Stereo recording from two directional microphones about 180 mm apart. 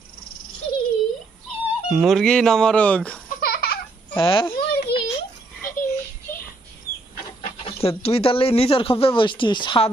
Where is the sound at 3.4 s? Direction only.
60° left (ahead or behind).